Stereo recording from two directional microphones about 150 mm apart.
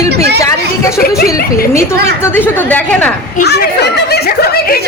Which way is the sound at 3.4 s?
90° left.